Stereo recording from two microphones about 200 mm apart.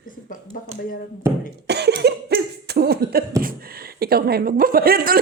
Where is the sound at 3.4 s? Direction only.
45° right (ahead or behind).